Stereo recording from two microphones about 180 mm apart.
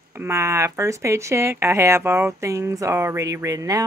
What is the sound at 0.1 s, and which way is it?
Speech, 15° right (ahead or behind).